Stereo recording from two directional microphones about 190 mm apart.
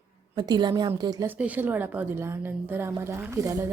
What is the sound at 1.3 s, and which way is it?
Speech, 10° right (ahead or behind).